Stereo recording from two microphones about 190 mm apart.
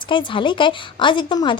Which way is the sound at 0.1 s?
25° left (ahead or behind).